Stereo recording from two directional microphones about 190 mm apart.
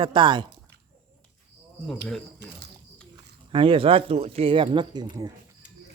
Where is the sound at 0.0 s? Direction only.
25° right (ahead or behind).